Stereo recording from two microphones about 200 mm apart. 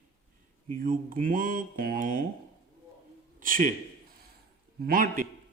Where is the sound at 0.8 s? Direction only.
45° right (ahead or behind).